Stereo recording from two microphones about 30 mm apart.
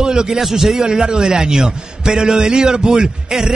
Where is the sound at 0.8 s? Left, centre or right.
Right.